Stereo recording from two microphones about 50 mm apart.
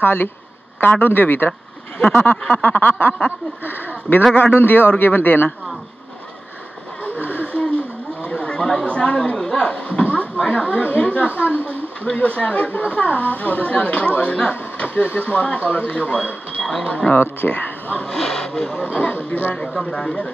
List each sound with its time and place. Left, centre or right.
0.0 s speech: left
2.0 s speech: left
2.5 s speech: left
3.6 s speech: left
7.0 s vehicle: left
8.3 s speech: left
17.2 s speech: left
18.0 s speech: centre
18.7 s speech: left
19.5 s speech: centre